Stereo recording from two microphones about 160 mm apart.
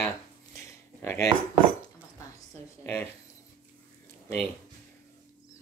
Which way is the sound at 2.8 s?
10° left (ahead or behind).